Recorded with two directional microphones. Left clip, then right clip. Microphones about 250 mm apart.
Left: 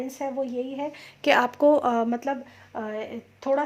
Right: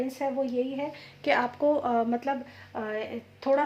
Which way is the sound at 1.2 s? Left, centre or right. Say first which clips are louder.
Left 5 dB; left.